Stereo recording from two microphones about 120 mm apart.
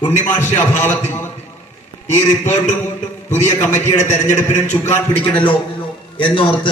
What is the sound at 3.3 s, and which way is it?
Speech, 75° left (ahead or behind).